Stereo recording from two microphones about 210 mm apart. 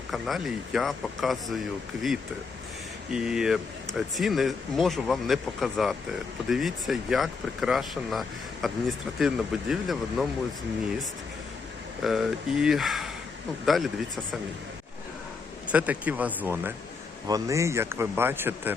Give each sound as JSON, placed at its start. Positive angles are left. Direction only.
{"t": 0.1, "sound": "speech", "side_deg": 0}
{"t": 3.1, "sound": "speech", "side_deg": -5}
{"t": 12.0, "sound": "speech", "side_deg": 0}
{"t": 15.7, "sound": "speech", "side_deg": -5}